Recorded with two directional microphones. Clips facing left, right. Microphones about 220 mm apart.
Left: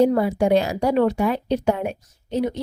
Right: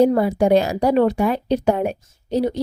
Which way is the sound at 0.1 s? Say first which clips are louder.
Right 2 dB; 40° right (ahead or behind).